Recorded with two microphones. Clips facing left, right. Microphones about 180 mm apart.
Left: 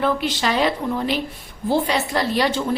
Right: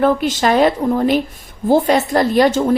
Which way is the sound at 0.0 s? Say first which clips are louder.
Right 6 dB; 45° right (ahead or behind).